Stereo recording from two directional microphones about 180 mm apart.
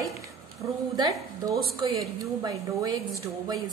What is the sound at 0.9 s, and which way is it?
A woman's voice, 20° right (ahead or behind).